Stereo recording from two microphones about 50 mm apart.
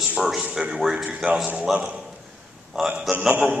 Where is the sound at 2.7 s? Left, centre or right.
Centre.